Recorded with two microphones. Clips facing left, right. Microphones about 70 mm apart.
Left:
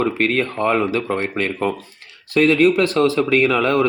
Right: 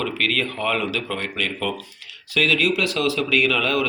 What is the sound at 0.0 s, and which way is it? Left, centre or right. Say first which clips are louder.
Speech: left 5 dB; left.